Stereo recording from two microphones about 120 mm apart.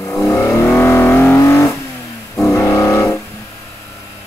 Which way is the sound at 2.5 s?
20° left (ahead or behind).